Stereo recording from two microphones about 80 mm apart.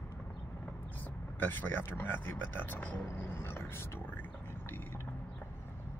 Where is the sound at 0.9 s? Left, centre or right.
Left.